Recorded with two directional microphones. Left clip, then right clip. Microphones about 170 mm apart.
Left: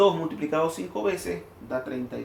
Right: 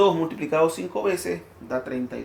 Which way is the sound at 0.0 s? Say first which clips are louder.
Right 1 dB; 35° right (ahead or behind).